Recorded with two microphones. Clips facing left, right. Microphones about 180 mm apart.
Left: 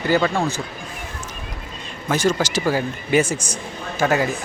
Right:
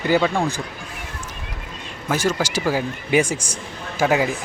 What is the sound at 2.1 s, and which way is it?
Speech, 10° right (ahead or behind).